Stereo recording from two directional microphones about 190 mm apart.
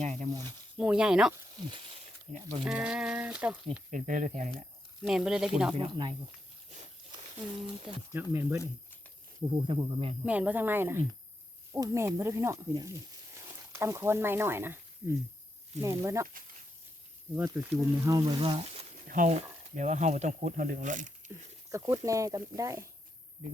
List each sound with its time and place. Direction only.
0.0 s a sound: 40° right (ahead or behind)
0.8 s speech: 5° right (ahead or behind)
1.5 s a sound: 25° right (ahead or behind)
2.3 s speech: 35° right (ahead or behind)
2.6 s speech: 5° right (ahead or behind)
3.9 s speech: 45° right (ahead or behind)
5.0 s speech: 5° right (ahead or behind)
5.7 s speech: 25° right (ahead or behind)
8.1 s speech: 10° right (ahead or behind)
9.6 s speech: 25° right (ahead or behind)
10.2 s speech: 5° right (ahead or behind)
17.3 s speech: 15° right (ahead or behind); by 18.9 s 30° right (ahead or behind)
19.0 s speech: 45° right (ahead or behind)
21.7 s speech: 15° right (ahead or behind)